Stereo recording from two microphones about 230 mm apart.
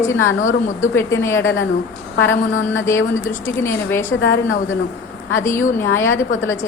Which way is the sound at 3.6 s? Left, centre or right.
Centre.